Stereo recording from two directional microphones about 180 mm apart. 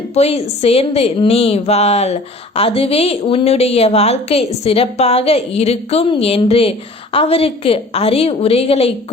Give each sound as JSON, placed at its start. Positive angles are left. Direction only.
{"t": 0.1, "sound": "a woman's voice", "side_deg": 35}